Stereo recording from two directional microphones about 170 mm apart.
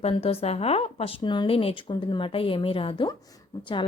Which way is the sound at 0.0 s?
35° left (ahead or behind).